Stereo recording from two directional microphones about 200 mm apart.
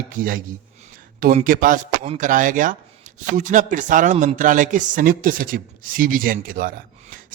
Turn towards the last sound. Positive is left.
turn(degrees=-45)  # may be behind; listen again after turning